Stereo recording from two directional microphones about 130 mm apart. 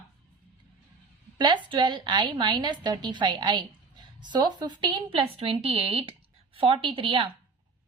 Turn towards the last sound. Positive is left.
turn(degrees=-45)  # may be behind; listen again after turning